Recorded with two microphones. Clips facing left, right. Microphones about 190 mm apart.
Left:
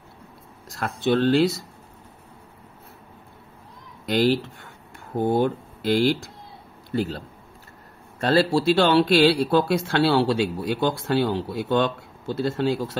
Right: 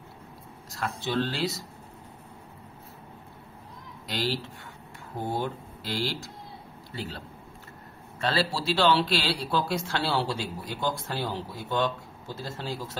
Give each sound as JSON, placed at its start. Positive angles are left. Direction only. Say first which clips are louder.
{"t": 0.7, "sound": "speech", "louder": "left 7 dB", "side_deg": 60}
{"t": 4.0, "sound": "a man's voice", "louder": "left 10 dB", "side_deg": 55}
{"t": 8.2, "sound": "speech", "louder": "left 8 dB", "side_deg": 50}